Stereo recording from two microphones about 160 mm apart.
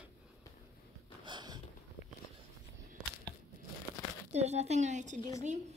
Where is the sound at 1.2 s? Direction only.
25° right (ahead or behind).